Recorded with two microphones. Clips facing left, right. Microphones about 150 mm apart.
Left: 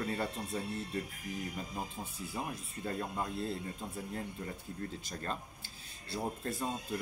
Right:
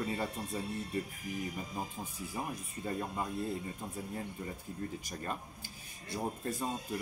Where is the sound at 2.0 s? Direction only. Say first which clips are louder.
Even; 10° right (ahead or behind).